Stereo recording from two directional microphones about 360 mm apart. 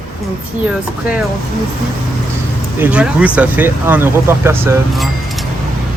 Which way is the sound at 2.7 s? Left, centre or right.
Centre.